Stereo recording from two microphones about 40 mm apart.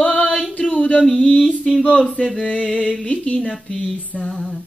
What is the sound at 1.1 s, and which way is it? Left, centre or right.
Music, left.